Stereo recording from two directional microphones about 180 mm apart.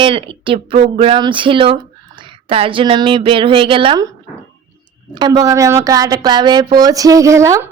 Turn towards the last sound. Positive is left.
turn(degrees=-15)  # may be behind; listen again after turning